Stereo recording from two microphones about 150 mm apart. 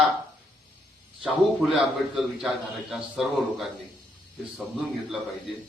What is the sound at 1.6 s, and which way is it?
A man's voice, 5° right (ahead or behind).